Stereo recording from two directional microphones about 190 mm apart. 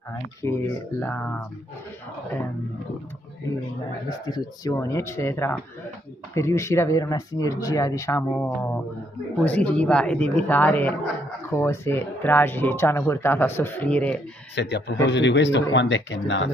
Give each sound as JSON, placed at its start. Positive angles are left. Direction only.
{"t": 0.4, "sound": "speech", "side_deg": 15}
{"t": 4.3, "sound": "speech", "side_deg": 20}
{"t": 14.5, "sound": "speech", "side_deg": 65}